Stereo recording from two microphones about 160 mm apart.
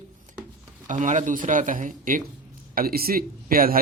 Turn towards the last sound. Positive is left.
turn(degrees=-65)  # may be behind; listen again after turning